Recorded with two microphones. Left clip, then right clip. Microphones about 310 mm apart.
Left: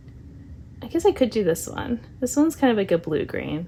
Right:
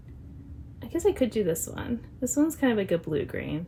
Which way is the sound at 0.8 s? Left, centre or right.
Left.